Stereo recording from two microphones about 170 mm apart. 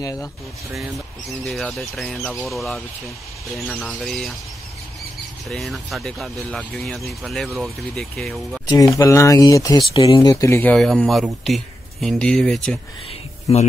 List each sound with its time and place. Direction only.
0.0 s speech: 20° left (ahead or behind)
0.7 s speech: centre (ahead or behind)
5.5 s speech: centre (ahead or behind)
8.6 s speech: 20° left (ahead or behind); by 12.7 s centre (ahead or behind)